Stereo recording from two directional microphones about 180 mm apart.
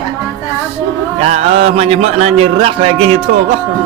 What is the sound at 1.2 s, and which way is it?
A man's voice, 35° right (ahead or behind).